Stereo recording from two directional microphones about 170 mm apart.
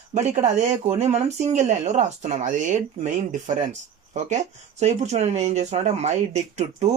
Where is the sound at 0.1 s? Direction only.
40° right (ahead or behind).